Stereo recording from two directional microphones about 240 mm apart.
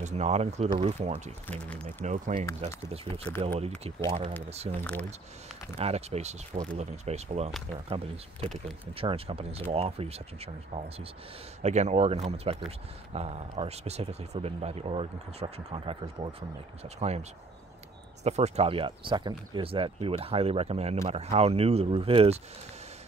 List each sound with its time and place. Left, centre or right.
0.0 s speech: right
1.5 s speech: centre
2.0 s speech: right
3.4 s speech: right